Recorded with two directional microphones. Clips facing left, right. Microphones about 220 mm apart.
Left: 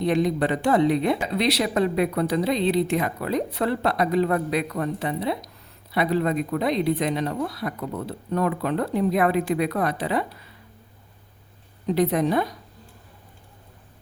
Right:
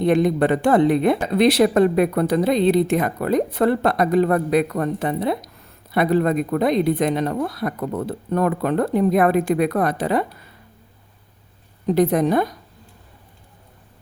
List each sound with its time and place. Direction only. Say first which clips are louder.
0.0 s speech: right 5 dB; 55° right (ahead or behind)
11.9 s speech: right 4 dB; 45° right (ahead or behind)